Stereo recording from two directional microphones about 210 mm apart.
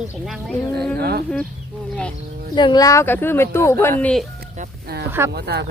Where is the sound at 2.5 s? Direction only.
20° left (ahead or behind); by 4.2 s 5° left (ahead or behind).